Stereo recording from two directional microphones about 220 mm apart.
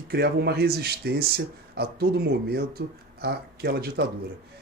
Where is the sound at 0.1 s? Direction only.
45° right (ahead or behind).